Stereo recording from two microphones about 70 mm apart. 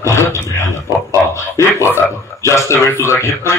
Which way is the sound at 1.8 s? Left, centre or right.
Right.